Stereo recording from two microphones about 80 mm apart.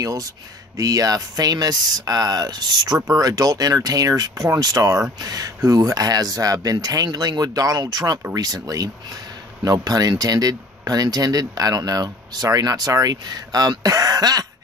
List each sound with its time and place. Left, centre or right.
0.0 s speech: right